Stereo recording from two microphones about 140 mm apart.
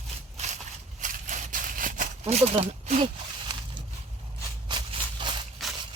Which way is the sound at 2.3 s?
45° right (ahead or behind).